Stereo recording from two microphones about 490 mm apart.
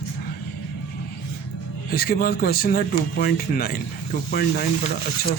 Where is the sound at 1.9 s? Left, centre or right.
Centre.